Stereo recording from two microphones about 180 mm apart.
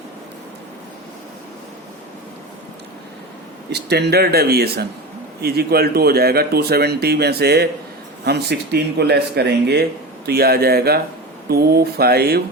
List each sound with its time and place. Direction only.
3.7 s speech: 65° right (ahead or behind)